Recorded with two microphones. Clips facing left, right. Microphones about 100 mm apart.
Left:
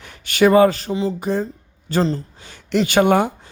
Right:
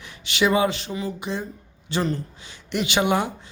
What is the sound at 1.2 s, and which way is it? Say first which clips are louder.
Speech: left 8 dB; 45° left (ahead or behind).